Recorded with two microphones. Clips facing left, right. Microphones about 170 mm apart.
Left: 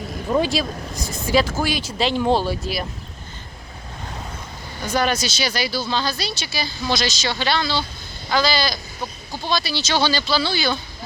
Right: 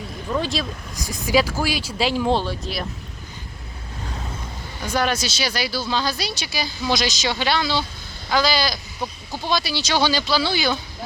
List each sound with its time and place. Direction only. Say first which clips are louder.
0.3 s speech: left 5 dB; 40° left (ahead or behind)
1.3 s a woman's voice: even; 10° right (ahead or behind); by 2.8 s 5° left (ahead or behind)
4.9 s a woman's voice: left 1 dB; centre (ahead or behind)